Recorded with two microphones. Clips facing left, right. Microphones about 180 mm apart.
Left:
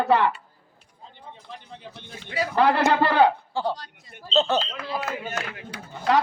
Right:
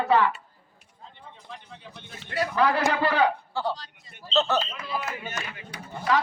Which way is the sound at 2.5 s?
65° left (ahead or behind).